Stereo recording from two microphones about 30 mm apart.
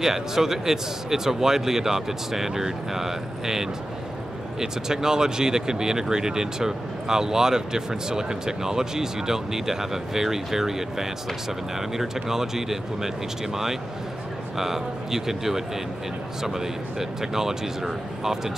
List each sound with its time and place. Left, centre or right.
0.0 s speech: centre